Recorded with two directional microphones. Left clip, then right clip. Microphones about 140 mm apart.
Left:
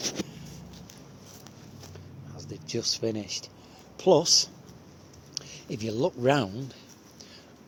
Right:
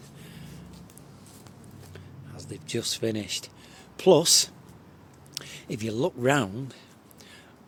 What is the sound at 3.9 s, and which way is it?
Speech, 50° right (ahead or behind).